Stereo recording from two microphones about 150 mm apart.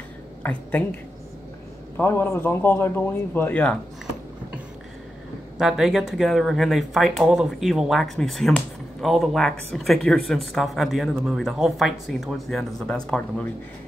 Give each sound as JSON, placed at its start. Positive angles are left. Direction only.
{"t": 0.4, "sound": "a man's voice", "side_deg": 10}
{"t": 2.0, "sound": "a man's voice", "side_deg": 15}
{"t": 5.6, "sound": "speech", "side_deg": -5}